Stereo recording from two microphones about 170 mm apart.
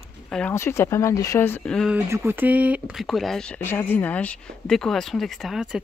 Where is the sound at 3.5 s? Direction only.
10° left (ahead or behind).